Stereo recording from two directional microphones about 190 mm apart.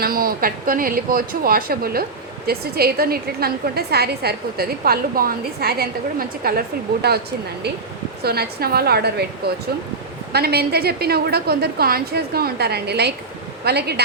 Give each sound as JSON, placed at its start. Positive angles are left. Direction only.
{"t": 0.0, "sound": "a woman's voice", "side_deg": -50}
{"t": 8.2, "sound": "a woman's voice", "side_deg": -55}
{"t": 10.3, "sound": "a woman's voice", "side_deg": -55}